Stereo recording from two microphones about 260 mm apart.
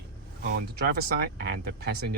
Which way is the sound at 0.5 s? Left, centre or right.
Right.